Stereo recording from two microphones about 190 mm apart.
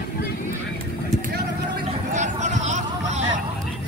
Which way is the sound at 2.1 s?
40° right (ahead or behind).